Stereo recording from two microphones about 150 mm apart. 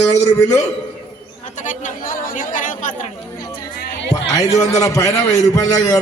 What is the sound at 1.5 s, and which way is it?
Speech, 55° left (ahead or behind).